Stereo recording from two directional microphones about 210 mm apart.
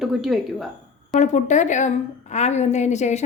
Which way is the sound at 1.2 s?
35° left (ahead or behind).